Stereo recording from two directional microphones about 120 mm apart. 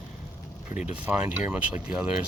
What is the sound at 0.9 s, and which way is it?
Speech, 10° right (ahead or behind).